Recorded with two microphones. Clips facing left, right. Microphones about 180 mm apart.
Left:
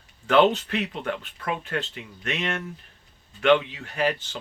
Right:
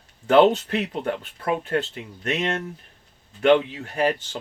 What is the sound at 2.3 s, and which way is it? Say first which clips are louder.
Speech: right 4 dB; 30° right (ahead or behind).